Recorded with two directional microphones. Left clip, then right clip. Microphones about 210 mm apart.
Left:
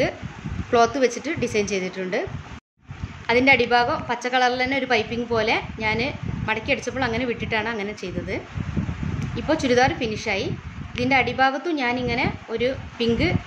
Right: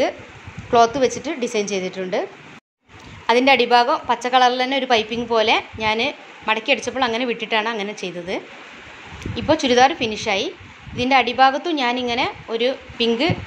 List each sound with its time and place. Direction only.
0.7 s a woman's voice: centre (ahead or behind)
3.3 s a woman's voice: 5° right (ahead or behind)